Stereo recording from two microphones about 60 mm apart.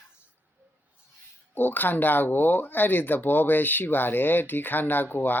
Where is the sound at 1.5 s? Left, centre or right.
Left.